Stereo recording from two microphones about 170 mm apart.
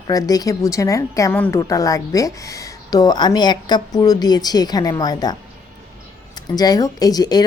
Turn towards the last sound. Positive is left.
turn(degrees=20)  # may be behind; listen again after turning